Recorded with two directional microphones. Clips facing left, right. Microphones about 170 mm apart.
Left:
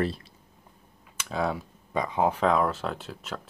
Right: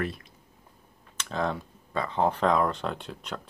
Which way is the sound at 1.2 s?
10° left (ahead or behind).